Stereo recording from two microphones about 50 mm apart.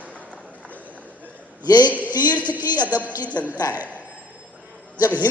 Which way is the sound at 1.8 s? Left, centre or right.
Right.